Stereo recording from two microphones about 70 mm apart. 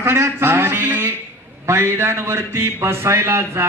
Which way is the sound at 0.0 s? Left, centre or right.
Right.